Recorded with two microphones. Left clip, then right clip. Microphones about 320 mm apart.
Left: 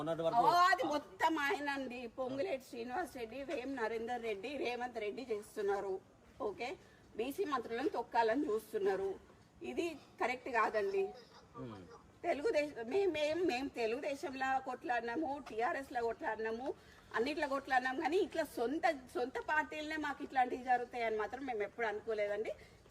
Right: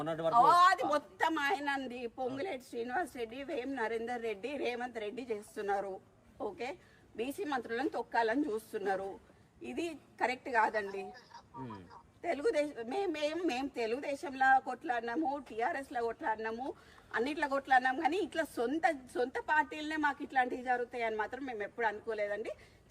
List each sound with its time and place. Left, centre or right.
0.0 s speech: right
0.4 s a sound: centre
0.9 s a woman's voice: centre
7.2 s a woman's voice: centre
12.2 s a woman's voice: centre
14.3 s speech: right
15.0 s a woman's voice: centre